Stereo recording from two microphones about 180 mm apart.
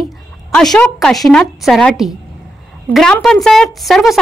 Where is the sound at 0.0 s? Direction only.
Centre (ahead or behind).